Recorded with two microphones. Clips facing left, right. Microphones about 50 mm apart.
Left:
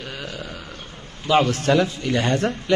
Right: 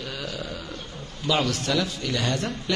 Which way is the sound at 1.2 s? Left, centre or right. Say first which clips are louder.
Left 6 dB; left.